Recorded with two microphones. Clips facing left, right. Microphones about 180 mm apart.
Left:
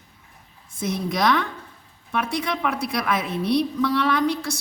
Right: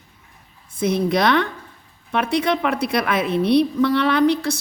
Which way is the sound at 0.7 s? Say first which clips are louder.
Right 6 dB; 60° right (ahead or behind).